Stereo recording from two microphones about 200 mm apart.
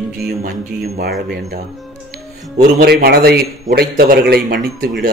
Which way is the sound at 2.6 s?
50° right (ahead or behind).